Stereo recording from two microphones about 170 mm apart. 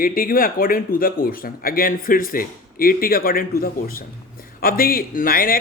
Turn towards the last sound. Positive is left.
turn(degrees=60)  # may be behind; listen again after turning